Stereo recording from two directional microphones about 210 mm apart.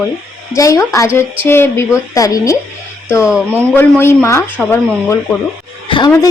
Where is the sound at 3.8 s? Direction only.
10° left (ahead or behind).